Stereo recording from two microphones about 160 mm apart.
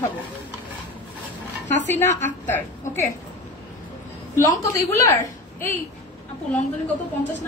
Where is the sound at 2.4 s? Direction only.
15° left (ahead or behind).